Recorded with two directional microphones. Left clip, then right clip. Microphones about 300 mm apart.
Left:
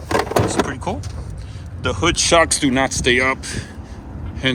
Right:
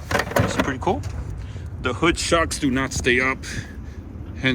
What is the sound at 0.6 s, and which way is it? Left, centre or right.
Speech, centre.